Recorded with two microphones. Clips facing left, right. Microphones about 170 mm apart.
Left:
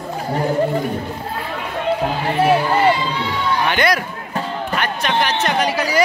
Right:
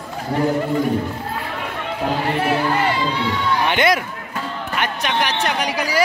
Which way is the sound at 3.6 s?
20° right (ahead or behind).